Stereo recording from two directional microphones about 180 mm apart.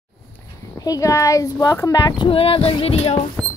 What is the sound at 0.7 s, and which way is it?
Speech, 20° left (ahead or behind).